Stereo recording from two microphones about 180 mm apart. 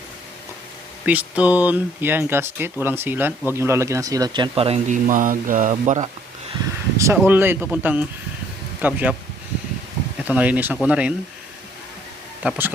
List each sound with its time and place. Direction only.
1.0 s speech: 10° right (ahead or behind)
4.5 s speech: 35° right (ahead or behind)
6.9 s speech: 15° right (ahead or behind)
10.2 s speech: 10° right (ahead or behind)
12.4 s speech: 10° right (ahead or behind)